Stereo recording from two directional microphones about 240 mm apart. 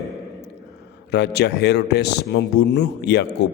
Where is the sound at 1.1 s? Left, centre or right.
Left.